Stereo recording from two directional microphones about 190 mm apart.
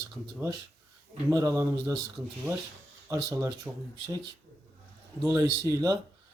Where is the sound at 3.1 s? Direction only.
15° right (ahead or behind).